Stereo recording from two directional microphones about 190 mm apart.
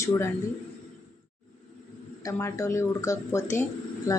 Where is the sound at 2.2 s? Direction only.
15° left (ahead or behind).